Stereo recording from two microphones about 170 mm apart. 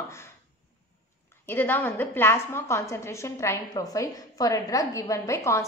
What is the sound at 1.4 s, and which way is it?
A woman's voice, 15° left (ahead or behind).